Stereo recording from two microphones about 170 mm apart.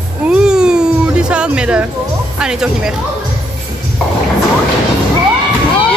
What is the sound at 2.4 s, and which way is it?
Speech, 5° right (ahead or behind).